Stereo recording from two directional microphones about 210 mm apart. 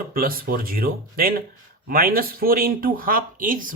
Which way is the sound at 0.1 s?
45° right (ahead or behind).